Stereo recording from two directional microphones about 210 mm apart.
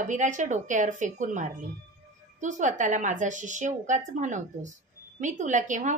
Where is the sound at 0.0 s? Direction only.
35° right (ahead or behind).